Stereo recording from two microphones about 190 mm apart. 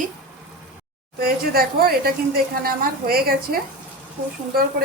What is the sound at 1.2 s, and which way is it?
A woman's voice, 50° right (ahead or behind).